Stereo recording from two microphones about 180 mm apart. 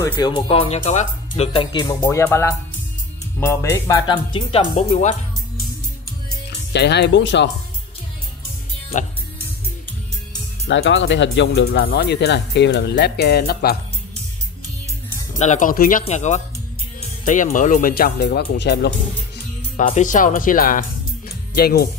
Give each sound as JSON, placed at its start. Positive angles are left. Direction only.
{"t": 0.0, "sound": "speech", "side_deg": 25}
{"t": 2.0, "sound": "speech", "side_deg": 10}
{"t": 6.7, "sound": "speech", "side_deg": 70}
{"t": 10.7, "sound": "speech", "side_deg": 90}
{"t": 15.3, "sound": "speech", "side_deg": 40}
{"t": 19.8, "sound": "speech", "side_deg": 45}
{"t": 21.3, "sound": "music", "side_deg": 60}